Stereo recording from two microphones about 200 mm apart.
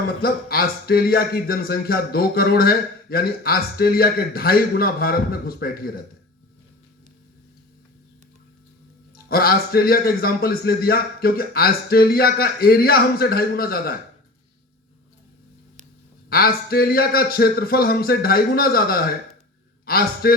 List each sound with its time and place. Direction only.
0.2 s speech: 50° left (ahead or behind)
9.3 s speech: 50° left (ahead or behind)
16.3 s a man's voice: 50° left (ahead or behind)